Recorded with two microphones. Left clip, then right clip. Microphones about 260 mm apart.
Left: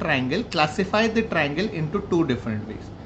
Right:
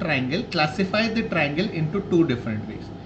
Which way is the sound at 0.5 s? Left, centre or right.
Centre.